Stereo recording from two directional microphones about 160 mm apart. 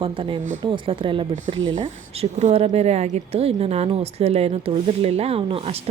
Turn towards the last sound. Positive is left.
turn(degrees=-40)  # may be behind; listen again after turning